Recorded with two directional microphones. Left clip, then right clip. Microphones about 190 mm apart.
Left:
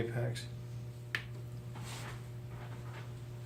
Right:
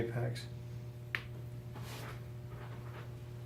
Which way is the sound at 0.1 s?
5° right (ahead or behind).